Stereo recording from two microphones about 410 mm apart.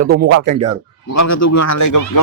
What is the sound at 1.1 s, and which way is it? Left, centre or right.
Speech, left.